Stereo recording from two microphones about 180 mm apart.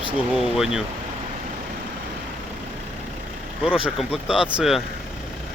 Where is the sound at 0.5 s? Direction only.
Centre (ahead or behind).